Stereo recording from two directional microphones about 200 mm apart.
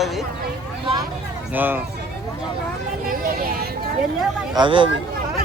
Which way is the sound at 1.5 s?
10° right (ahead or behind).